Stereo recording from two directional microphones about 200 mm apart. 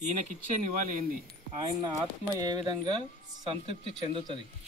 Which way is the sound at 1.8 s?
20° right (ahead or behind).